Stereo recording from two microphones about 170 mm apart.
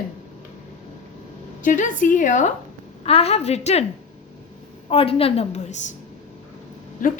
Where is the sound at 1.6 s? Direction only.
50° left (ahead or behind).